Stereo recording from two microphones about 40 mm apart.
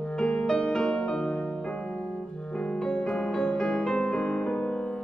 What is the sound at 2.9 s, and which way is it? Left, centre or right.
Music, centre.